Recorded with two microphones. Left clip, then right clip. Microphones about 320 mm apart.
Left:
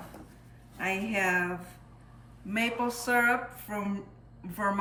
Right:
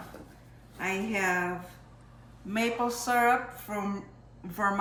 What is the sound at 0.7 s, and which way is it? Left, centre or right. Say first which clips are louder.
Speech: left 1 dB; centre.